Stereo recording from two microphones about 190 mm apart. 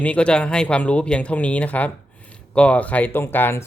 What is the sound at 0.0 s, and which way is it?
Speech, 5° left (ahead or behind).